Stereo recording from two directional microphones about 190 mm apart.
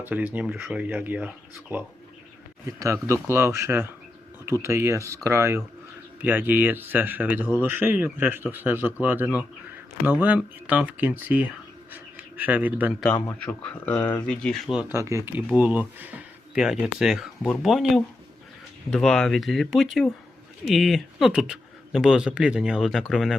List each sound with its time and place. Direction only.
0.0 s speech: 10° right (ahead or behind)
11.9 s a sound: 10° right (ahead or behind)
13.2 s speech: 5° left (ahead or behind)
13.9 s speech: 20° left (ahead or behind)
14.3 s speech: 5° left (ahead or behind)